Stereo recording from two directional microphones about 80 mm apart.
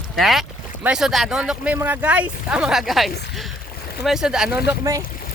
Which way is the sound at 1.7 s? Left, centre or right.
Right.